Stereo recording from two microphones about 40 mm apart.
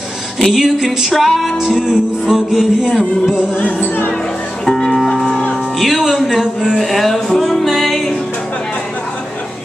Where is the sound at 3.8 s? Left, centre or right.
Left.